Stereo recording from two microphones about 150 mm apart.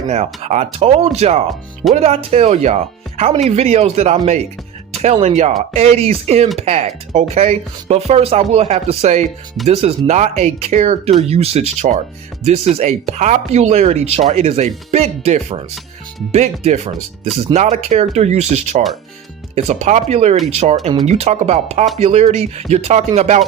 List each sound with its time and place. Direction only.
0.1 s speech: 45° right (ahead or behind)